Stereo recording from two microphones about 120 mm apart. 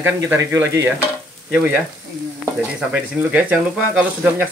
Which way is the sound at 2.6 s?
10° right (ahead or behind).